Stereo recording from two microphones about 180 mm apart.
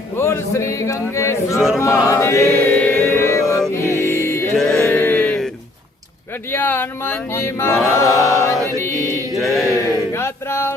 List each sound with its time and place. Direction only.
0.2 s speech: 15° left (ahead or behind)
1.5 s chant: centre (ahead or behind)
1.8 s chant: 15° left (ahead or behind)
3.8 s music: 15° left (ahead or behind)
4.5 s a sound: 5° left (ahead or behind)
6.5 s speech: 10° left (ahead or behind)
7.9 s chant: 15° left (ahead or behind)
9.6 s a sound: 15° left (ahead or behind)